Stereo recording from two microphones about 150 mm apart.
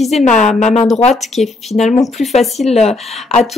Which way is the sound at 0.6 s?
50° left (ahead or behind).